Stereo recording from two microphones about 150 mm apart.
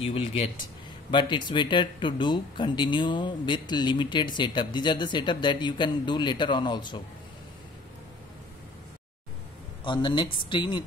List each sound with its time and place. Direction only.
0.0 s speech: 40° left (ahead or behind)
9.8 s speech: 30° left (ahead or behind)